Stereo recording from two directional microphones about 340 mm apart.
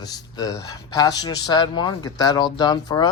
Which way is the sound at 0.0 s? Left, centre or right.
Centre.